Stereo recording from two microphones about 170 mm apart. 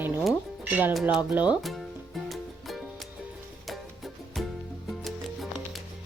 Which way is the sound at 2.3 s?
Centre (ahead or behind).